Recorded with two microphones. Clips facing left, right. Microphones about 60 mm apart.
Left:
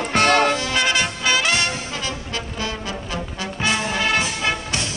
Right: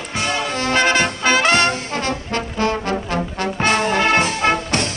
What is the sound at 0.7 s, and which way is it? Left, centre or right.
Brass instrument, right.